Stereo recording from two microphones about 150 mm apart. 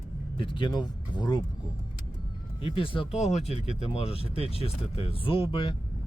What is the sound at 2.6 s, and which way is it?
Speech, 35° left (ahead or behind).